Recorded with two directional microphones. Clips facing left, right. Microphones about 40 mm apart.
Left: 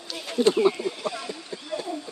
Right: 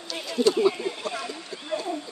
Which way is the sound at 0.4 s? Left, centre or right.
Left.